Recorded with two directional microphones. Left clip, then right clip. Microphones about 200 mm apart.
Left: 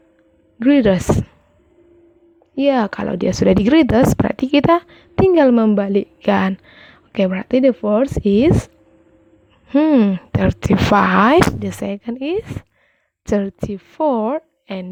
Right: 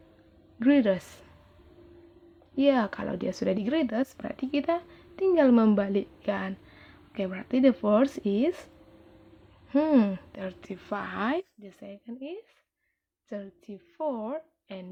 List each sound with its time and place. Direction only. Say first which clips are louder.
0.6 s speech: left 10 dB; 40° left (ahead or behind)
2.6 s speech: left 8 dB; 35° left (ahead or behind)
9.6 s speech: left 10 dB; 40° left (ahead or behind)